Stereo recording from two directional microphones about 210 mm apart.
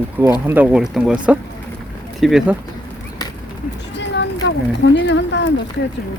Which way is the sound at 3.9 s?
55° left (ahead or behind).